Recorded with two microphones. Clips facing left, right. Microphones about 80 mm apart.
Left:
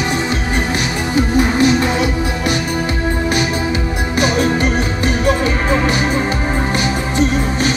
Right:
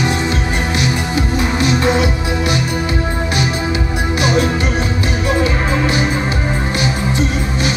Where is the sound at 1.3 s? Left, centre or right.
Left.